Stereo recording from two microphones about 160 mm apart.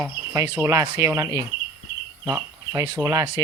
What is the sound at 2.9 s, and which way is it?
Speech, 20° right (ahead or behind).